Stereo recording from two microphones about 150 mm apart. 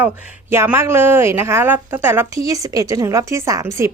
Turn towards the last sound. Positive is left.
turn(degrees=-20)  # may be behind; listen again after turning